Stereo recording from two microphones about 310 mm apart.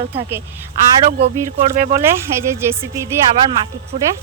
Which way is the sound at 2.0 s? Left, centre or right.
Centre.